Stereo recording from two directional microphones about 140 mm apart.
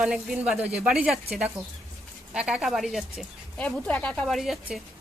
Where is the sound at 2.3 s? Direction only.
5° right (ahead or behind).